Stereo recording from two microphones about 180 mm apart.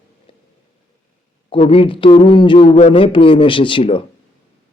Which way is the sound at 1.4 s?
35° left (ahead or behind).